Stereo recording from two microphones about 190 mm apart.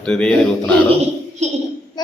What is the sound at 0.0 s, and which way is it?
Speech, 5° left (ahead or behind).